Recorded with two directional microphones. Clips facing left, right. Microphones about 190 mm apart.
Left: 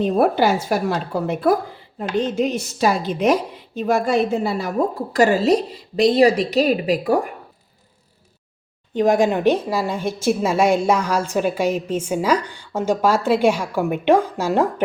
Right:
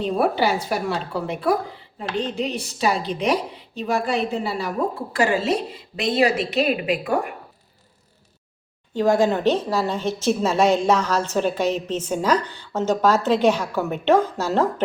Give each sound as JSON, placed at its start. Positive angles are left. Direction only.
{"t": 0.0, "sound": "a woman's voice", "side_deg": 45}
{"t": 8.9, "sound": "a woman's voice", "side_deg": 20}